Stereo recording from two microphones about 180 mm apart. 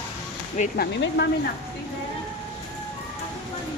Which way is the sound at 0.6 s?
40° left (ahead or behind).